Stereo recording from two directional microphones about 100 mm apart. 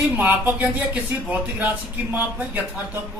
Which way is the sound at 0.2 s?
20° right (ahead or behind).